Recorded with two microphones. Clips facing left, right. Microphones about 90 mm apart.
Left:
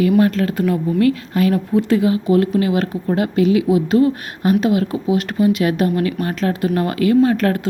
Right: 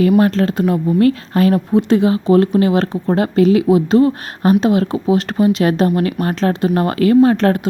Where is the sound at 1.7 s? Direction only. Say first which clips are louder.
Right 2 dB; 25° right (ahead or behind); by 6.5 s 40° right (ahead or behind).